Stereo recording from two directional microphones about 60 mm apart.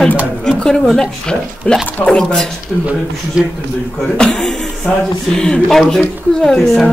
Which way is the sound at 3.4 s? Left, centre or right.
Centre.